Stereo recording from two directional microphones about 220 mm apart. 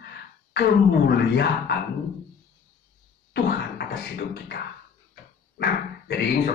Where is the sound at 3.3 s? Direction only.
45° left (ahead or behind).